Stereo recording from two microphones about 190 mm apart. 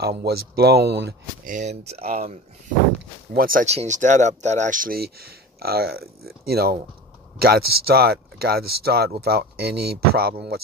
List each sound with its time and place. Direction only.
0.0 s speech: 55° right (ahead or behind)
1.5 s speech: 35° right (ahead or behind)
3.3 s speech: 45° right (ahead or behind)